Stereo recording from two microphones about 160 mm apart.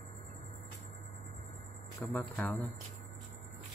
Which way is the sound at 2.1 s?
5° left (ahead or behind).